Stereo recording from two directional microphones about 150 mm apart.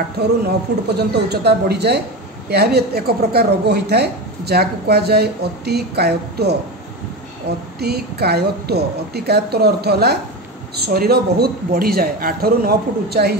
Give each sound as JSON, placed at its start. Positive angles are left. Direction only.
{"t": 0.2, "sound": "a woman's voice", "side_deg": -90}